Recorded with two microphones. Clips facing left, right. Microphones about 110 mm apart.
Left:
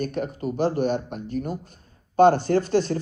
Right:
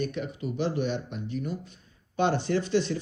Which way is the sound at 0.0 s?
45° left (ahead or behind).